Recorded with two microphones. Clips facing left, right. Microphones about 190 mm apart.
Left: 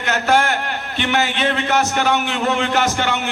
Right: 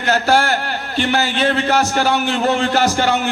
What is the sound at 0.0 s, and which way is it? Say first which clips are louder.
A man's voice: right 2 dB; 35° right (ahead or behind).